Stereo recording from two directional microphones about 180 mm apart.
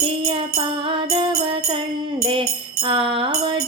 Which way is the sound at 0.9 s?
30° right (ahead or behind).